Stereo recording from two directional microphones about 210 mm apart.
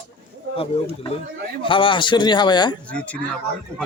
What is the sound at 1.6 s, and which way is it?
A man's voice, 25° left (ahead or behind).